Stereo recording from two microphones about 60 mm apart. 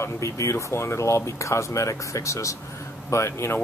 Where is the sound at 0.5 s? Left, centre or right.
Left.